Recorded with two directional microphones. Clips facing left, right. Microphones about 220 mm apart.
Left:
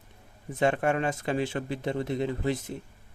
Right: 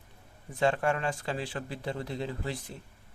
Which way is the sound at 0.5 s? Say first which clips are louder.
Left 2 dB; 20° left (ahead or behind).